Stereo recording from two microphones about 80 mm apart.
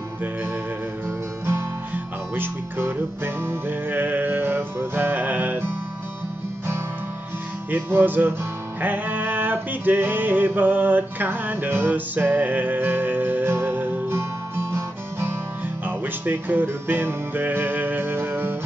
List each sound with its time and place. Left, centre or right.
1.0 s music: right
7.7 s music: right